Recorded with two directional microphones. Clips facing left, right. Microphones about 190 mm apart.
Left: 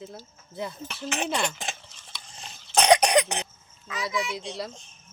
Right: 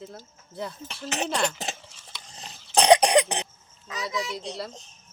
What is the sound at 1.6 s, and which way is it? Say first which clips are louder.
Dog: right 2 dB; 40° right (ahead or behind).